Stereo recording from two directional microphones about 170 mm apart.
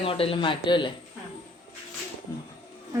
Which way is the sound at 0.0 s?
35° left (ahead or behind).